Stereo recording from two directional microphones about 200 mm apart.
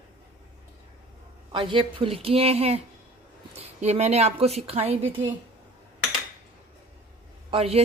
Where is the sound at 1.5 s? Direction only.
25° right (ahead or behind).